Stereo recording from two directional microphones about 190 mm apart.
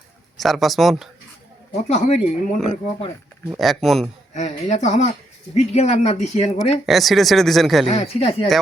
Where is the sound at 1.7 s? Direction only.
35° left (ahead or behind).